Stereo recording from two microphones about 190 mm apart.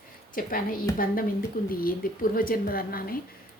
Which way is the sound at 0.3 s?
50° left (ahead or behind).